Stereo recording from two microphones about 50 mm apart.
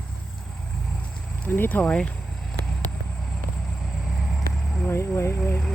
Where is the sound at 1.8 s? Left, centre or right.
Left.